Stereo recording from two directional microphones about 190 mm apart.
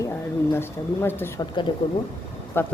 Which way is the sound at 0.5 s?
10° left (ahead or behind).